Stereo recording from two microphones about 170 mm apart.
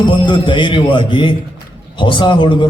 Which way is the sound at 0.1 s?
30° left (ahead or behind).